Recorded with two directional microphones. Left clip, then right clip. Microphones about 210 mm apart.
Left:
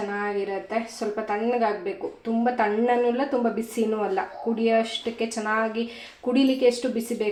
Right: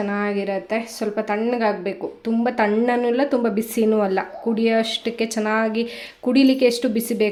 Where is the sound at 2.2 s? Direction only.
50° right (ahead or behind).